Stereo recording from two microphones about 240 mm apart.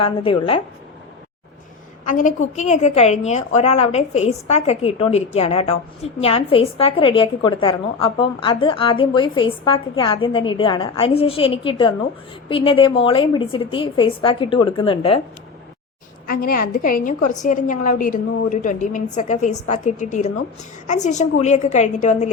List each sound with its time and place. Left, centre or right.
0.0 s a woman's voice: left
2.0 s a woman's voice: left
16.3 s a woman's voice: left